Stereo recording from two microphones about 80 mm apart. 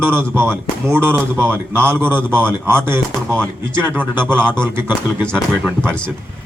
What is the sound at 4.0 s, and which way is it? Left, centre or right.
Speech, centre.